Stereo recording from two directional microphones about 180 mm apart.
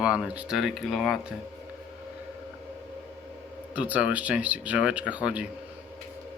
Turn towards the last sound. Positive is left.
turn(degrees=-5)  # may be behind; listen again after turning